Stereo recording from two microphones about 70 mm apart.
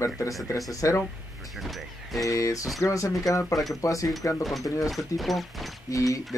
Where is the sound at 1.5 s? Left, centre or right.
Centre.